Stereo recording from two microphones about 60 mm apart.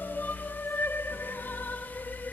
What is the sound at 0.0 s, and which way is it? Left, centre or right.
Music, left.